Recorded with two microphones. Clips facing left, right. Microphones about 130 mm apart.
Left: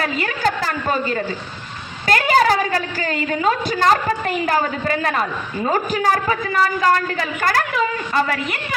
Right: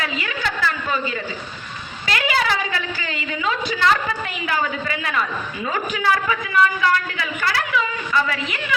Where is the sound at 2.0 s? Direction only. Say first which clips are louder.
Left 6 dB; 45° left (ahead or behind).